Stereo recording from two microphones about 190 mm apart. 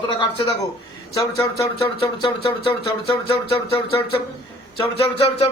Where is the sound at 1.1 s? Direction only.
15° left (ahead or behind).